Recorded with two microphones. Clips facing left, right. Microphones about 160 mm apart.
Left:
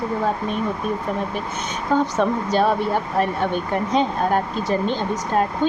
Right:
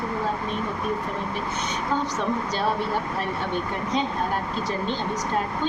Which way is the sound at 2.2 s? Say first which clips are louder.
Left 7 dB; 55° left (ahead or behind).